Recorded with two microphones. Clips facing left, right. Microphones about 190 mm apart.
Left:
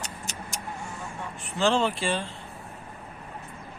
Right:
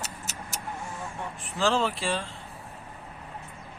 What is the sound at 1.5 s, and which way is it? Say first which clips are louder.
Speech: left 2 dB; centre (ahead or behind).